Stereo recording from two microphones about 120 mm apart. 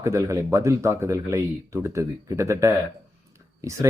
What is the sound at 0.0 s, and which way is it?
Speech, 25° right (ahead or behind).